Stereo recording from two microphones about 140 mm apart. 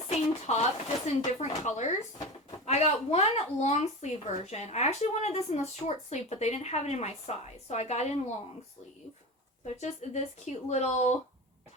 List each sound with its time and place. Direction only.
0.1 s speech: 50° left (ahead or behind)
9.8 s speech: 55° left (ahead or behind)